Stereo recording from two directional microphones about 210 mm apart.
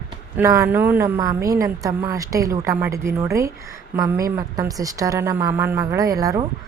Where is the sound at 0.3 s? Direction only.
15° right (ahead or behind).